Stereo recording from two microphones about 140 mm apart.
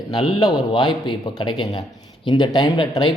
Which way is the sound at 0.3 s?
30° left (ahead or behind).